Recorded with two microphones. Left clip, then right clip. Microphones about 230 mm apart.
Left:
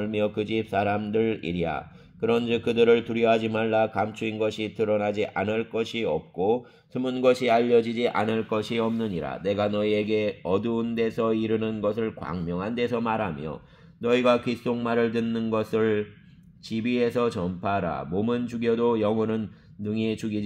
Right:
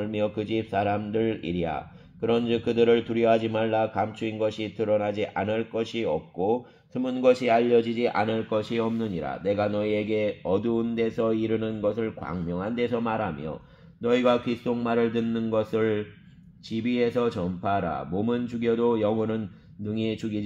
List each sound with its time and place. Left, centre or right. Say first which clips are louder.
0.0 s a man's voice: left 1 dB; left